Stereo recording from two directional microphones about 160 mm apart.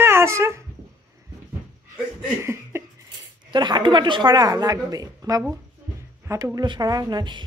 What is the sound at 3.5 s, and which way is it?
Speech, 30° right (ahead or behind).